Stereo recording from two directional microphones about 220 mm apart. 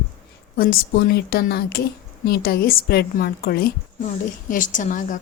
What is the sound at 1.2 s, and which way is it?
A woman's voice, 45° left (ahead or behind).